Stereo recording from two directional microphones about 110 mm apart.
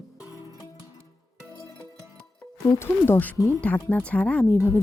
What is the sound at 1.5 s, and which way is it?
Music, 30° right (ahead or behind).